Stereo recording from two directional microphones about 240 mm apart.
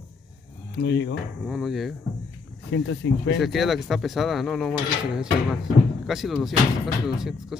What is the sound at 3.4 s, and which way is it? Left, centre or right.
Speech, centre.